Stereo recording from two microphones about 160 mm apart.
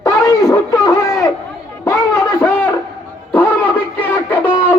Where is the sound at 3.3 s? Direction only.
10° left (ahead or behind).